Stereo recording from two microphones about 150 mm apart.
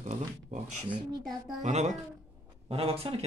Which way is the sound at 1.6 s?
50° right (ahead or behind).